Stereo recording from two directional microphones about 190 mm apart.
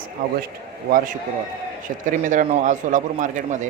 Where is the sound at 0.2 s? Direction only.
50° right (ahead or behind).